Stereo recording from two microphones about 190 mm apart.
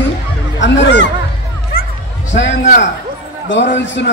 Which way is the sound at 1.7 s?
40° left (ahead or behind).